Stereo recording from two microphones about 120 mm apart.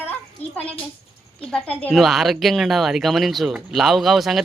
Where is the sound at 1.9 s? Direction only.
Centre (ahead or behind).